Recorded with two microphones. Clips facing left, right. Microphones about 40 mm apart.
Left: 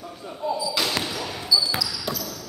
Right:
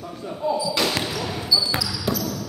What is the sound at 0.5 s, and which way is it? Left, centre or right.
Basketball bounce, centre.